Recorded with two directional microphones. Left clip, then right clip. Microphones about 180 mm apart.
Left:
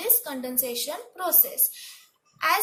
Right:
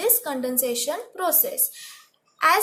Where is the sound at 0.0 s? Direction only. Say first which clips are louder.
Right 6 dB; 50° right (ahead or behind).